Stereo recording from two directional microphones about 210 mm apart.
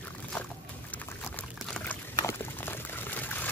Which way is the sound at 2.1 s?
10° left (ahead or behind).